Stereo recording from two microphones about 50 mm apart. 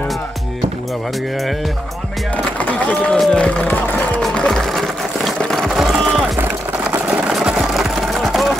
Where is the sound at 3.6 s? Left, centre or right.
Left.